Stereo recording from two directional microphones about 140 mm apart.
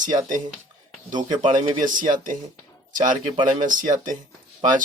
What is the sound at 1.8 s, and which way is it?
Speech, 70° right (ahead or behind).